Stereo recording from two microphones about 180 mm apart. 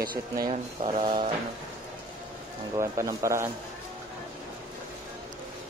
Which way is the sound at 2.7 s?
15° right (ahead or behind).